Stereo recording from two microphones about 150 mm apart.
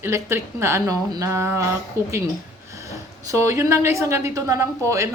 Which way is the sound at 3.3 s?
20° right (ahead or behind).